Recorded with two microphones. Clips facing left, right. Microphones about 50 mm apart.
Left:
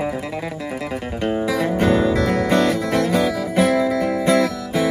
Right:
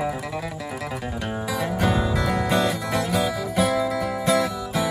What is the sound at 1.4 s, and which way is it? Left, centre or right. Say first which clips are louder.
Music: left 3 dB; left.